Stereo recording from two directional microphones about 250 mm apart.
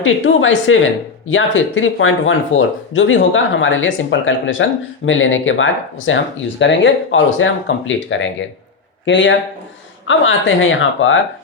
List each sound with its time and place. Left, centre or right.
0.0 s speech: left